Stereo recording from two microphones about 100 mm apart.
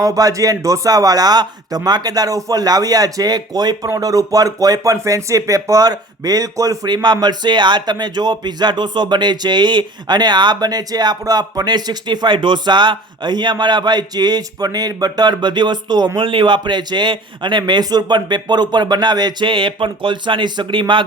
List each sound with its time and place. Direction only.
0.0 s a man's voice: 35° right (ahead or behind); by 21.0 s 55° right (ahead or behind)